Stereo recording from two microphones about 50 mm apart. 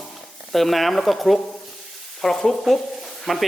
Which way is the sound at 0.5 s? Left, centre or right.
Centre.